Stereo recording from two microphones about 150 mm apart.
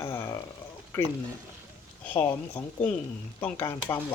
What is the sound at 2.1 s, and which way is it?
Speech, 15° left (ahead or behind).